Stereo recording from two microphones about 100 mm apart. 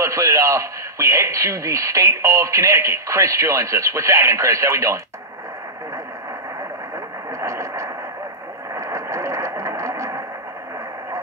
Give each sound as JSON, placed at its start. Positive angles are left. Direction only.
{"t": 0.0, "sound": "a man's voice", "side_deg": -30}
{"t": 7.2, "sound": "radio", "side_deg": -30}
{"t": 8.7, "sound": "a sound", "side_deg": -30}